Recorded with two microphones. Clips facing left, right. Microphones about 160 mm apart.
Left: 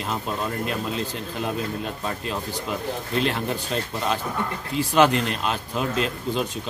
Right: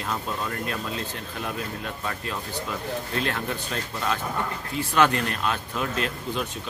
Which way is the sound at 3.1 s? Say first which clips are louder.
Left 6 dB; 25° left (ahead or behind).